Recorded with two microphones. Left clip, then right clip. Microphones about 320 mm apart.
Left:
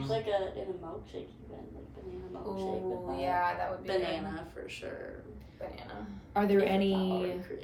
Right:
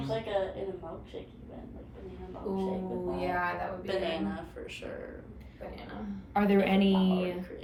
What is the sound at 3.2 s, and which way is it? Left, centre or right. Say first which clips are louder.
Speech: left 2 dB; centre.